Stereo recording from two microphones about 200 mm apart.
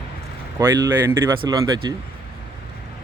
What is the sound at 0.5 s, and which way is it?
Speech, 15° right (ahead or behind).